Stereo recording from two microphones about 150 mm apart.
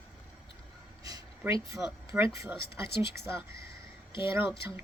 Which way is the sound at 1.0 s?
25° right (ahead or behind).